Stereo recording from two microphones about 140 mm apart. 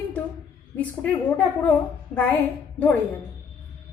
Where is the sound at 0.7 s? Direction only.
10° left (ahead or behind).